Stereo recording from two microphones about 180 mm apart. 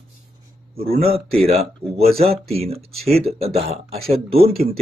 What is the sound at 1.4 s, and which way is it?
Speech, 35° right (ahead or behind).